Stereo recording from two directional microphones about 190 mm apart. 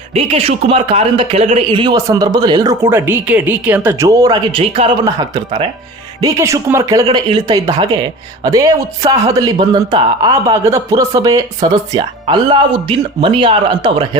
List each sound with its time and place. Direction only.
0.1 s speech: 30° right (ahead or behind)
5.0 s speech: 20° right (ahead or behind)